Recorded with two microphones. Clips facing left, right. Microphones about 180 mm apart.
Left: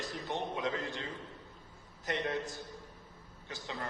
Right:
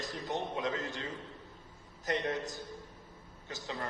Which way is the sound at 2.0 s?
40° right (ahead or behind).